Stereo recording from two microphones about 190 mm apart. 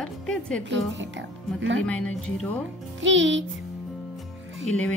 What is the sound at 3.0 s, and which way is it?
Speech, 75° right (ahead or behind).